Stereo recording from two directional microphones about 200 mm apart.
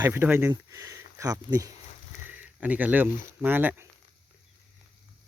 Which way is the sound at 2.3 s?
10° right (ahead or behind).